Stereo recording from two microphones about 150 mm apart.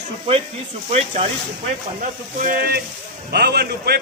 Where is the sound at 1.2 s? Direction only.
35° right (ahead or behind).